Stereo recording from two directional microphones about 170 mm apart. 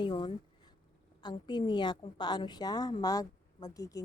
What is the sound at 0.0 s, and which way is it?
A woman's voice, 30° left (ahead or behind).